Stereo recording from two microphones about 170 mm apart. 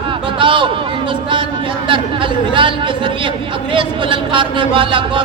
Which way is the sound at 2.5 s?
30° right (ahead or behind).